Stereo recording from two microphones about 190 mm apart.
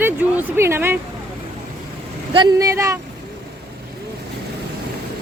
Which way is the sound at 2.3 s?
20° right (ahead or behind).